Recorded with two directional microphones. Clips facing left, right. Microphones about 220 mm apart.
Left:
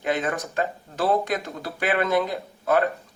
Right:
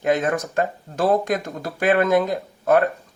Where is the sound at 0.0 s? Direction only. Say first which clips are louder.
Right 5 dB; 45° right (ahead or behind).